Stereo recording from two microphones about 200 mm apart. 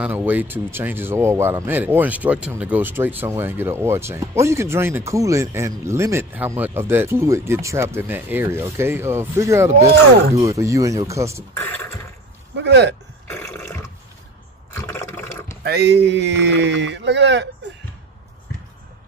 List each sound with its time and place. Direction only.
0.0 s speech: 10° right (ahead or behind)
12.5 s speech: 60° right (ahead or behind)
13.3 s burping: 10° left (ahead or behind)
14.9 s water: 10° left (ahead or behind)
15.6 s speech: 55° right (ahead or behind)